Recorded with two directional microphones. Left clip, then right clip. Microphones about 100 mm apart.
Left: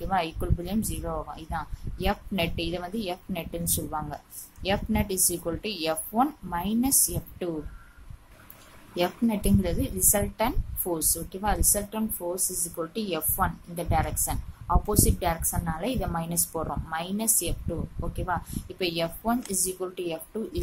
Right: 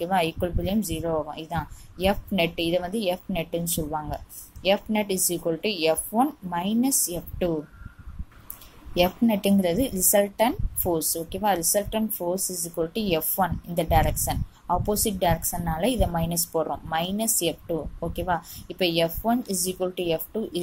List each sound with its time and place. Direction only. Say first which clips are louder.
0.0 s a woman's voice: right 4 dB; 20° right (ahead or behind)
8.9 s a woman's voice: right 5 dB; 30° right (ahead or behind)